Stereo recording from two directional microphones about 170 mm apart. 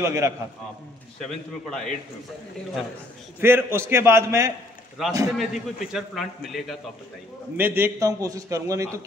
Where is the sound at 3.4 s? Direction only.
15° right (ahead or behind).